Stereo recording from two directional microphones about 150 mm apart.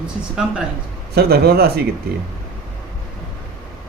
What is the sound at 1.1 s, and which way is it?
Speech, 90° right.